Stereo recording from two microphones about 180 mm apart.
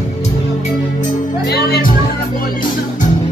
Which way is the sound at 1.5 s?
60° left (ahead or behind).